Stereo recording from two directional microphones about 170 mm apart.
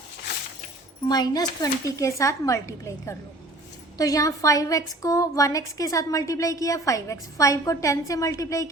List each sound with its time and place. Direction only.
1.0 s a woman's voice: 25° left (ahead or behind)